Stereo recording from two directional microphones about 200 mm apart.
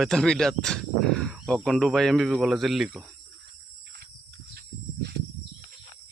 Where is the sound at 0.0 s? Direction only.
Centre (ahead or behind).